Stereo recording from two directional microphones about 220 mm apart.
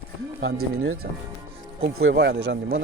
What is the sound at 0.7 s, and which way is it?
Speech, 70° right (ahead or behind).